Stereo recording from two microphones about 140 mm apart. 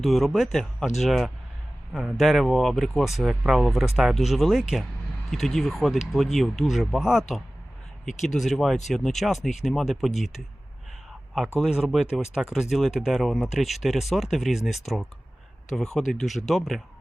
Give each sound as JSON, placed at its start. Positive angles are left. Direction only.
{"t": 0.0, "sound": "speech", "side_deg": 0}
{"t": 11.6, "sound": "speech", "side_deg": -5}